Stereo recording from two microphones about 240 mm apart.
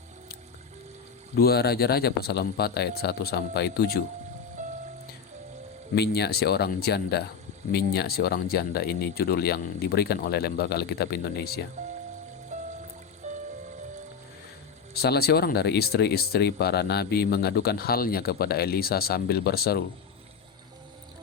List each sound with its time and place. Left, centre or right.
1.4 s speech: left
5.9 s speech: left
12.5 s music: right
14.9 s speech: left